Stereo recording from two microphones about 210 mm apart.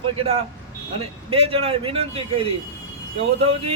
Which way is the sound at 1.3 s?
25° right (ahead or behind).